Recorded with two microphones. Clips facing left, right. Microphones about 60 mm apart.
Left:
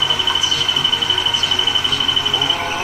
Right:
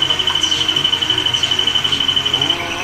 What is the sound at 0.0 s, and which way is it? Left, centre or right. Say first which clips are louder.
Music: even; left.